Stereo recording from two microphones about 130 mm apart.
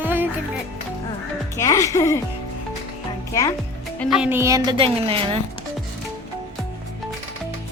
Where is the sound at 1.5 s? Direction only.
25° left (ahead or behind).